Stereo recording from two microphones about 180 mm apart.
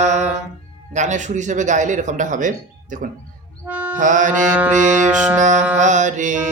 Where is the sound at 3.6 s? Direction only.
10° right (ahead or behind).